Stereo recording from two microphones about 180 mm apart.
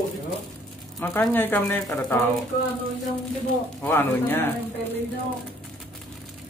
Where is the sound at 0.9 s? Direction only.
15° left (ahead or behind).